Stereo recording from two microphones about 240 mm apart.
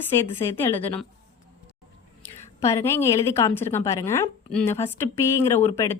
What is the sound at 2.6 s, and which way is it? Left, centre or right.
A woman's voice, centre.